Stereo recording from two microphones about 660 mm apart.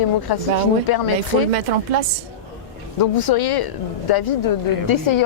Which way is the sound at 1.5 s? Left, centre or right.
Right.